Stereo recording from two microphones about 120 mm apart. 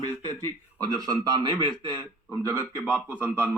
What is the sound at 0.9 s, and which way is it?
A man's voice, 35° right (ahead or behind).